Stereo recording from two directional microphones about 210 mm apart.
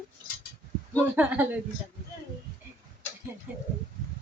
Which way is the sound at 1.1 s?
5° right (ahead or behind).